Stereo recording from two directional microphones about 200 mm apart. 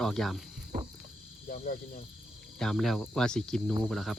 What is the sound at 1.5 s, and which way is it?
Speech, 45° left (ahead or behind).